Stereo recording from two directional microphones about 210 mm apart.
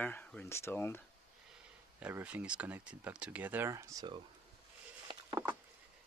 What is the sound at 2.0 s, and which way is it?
Speech, 10° right (ahead or behind).